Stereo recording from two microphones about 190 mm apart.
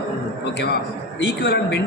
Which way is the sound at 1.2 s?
65° left (ahead or behind).